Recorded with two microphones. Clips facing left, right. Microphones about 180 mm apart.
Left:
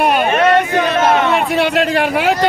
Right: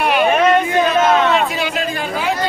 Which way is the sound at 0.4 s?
70° left (ahead or behind).